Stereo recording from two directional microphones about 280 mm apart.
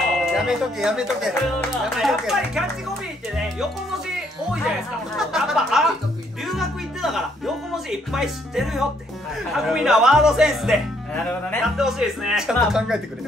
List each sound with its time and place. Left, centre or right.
0.2 s speech: centre
5.1 s speech: centre